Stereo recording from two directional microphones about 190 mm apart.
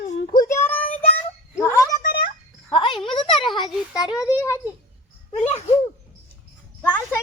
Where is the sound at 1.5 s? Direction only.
15° left (ahead or behind).